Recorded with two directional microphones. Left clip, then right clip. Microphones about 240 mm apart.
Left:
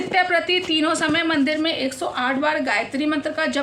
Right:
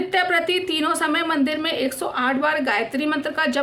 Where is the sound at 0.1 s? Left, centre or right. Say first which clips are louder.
Left 2 dB; right.